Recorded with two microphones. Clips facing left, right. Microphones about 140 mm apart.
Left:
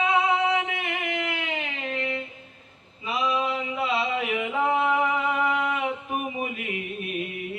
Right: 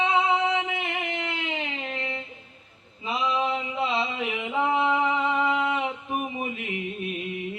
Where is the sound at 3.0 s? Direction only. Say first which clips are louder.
Even; 25° right (ahead or behind).